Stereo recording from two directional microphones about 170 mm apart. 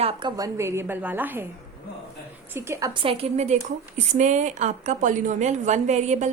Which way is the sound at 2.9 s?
30° right (ahead or behind).